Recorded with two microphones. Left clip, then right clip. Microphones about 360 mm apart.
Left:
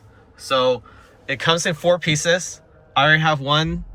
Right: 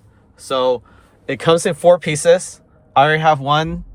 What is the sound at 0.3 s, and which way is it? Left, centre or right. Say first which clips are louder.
Speech: right 1 dB; centre.